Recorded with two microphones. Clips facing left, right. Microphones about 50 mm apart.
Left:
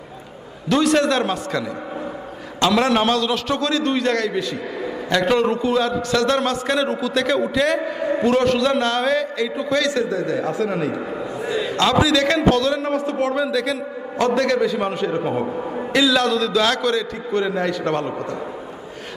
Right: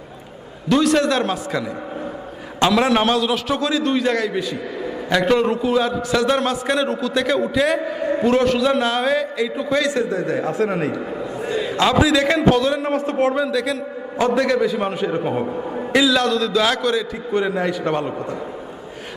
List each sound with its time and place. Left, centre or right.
0.7 s a man's voice: centre
2.6 s a man's voice: centre
9.8 s a man's voice: right
11.4 s a sound: right
11.7 s a man's voice: centre
13.1 s a man's voice: right
13.3 s a man's voice: centre
15.4 s a man's voice: centre